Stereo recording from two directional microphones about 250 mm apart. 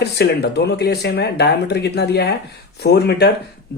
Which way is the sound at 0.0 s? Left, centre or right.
Left.